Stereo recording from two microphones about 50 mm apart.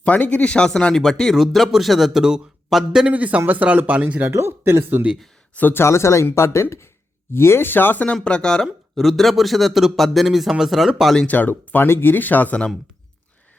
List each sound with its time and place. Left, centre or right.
0.0 s speech: left; by 3.1 s centre
3.1 s speech: right
4.3 s speech: right
4.8 s speech: right
5.5 s speech: left
5.8 s speech: left
7.3 s speech: left
8.0 s speech: centre
8.6 s speech: centre
11.3 s speech: left